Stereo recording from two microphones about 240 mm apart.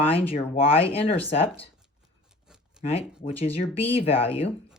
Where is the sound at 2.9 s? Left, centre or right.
Left.